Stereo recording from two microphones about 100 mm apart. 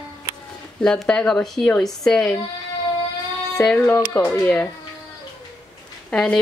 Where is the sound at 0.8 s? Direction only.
10° left (ahead or behind).